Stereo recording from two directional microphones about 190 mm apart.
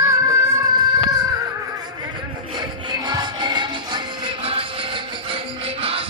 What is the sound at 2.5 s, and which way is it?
Music, 25° right (ahead or behind).